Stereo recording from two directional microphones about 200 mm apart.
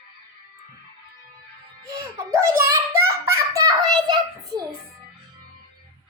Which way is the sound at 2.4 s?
15° right (ahead or behind).